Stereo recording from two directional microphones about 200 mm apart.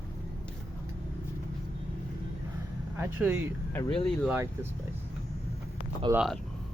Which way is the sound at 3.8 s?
25° left (ahead or behind).